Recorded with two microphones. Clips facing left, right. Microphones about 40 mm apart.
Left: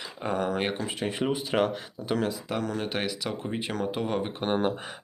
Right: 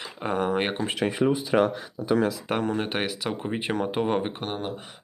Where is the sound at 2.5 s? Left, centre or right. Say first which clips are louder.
Right 4 dB; right.